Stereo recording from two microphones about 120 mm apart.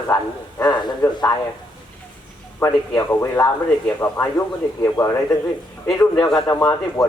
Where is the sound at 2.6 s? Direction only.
20° left (ahead or behind).